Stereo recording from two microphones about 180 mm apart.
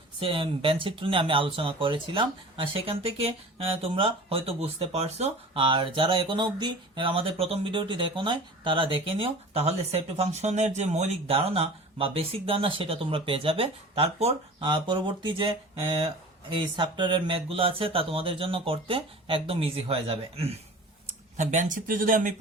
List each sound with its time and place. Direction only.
0.2 s speech: 30° right (ahead or behind); by 22.4 s 50° right (ahead or behind)